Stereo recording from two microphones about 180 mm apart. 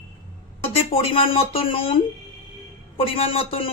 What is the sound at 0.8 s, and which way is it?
Speech, 30° left (ahead or behind).